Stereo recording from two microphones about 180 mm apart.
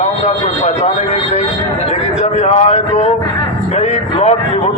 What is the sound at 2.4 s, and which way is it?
A man's voice, 40° left (ahead or behind).